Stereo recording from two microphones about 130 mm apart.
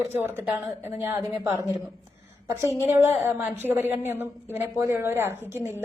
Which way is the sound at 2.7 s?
20° right (ahead or behind).